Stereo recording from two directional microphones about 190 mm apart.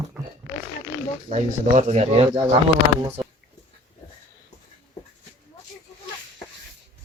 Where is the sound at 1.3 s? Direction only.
35° right (ahead or behind).